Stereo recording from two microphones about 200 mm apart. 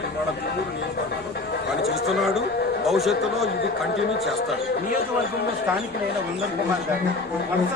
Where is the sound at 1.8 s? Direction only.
Centre (ahead or behind).